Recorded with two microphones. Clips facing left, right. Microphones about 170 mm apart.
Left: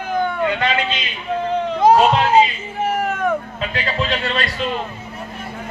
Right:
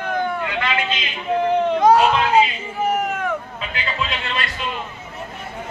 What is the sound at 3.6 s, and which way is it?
Music, 35° left (ahead or behind).